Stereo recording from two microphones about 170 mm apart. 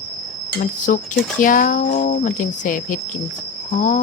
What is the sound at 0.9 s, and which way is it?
Speech, 55° left (ahead or behind).